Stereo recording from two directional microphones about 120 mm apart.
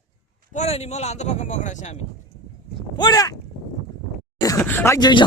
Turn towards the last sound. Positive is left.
turn(degrees=35)  # may be behind; listen again after turning